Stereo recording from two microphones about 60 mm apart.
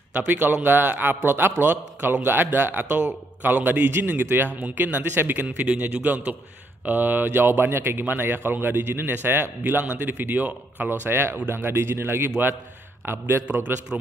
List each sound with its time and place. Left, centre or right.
0.1 s a man's voice: right
10.9 s speech: right